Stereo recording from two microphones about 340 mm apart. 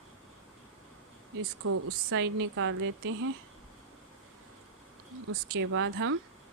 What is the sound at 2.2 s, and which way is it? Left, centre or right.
Speech, right.